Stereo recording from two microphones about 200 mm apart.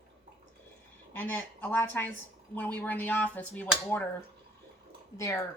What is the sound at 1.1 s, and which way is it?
Speech, 10° left (ahead or behind).